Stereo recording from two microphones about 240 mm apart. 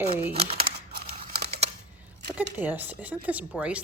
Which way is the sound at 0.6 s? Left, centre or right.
Right.